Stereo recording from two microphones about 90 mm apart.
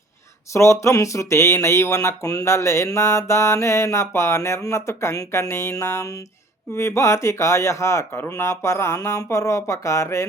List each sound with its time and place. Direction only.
0.5 s speech: 35° left (ahead or behind)